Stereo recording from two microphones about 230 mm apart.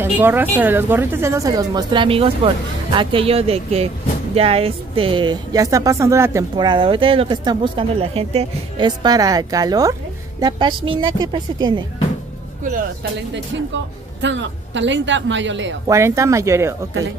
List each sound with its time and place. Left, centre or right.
0.0 s speech: centre
14.2 s a woman's voice: right
15.9 s speech: centre